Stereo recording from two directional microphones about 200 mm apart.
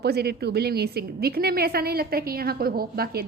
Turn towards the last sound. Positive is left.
turn(degrees=-50)  # may be behind; listen again after turning